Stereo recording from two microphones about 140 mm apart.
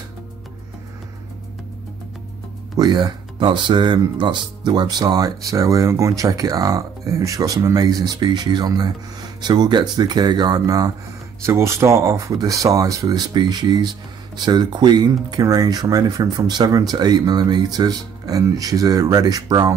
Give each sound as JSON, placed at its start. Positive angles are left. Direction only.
{"t": 2.8, "sound": "speech", "side_deg": -30}